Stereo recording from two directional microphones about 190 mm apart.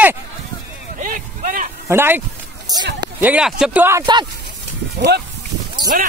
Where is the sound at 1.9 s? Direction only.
10° right (ahead or behind).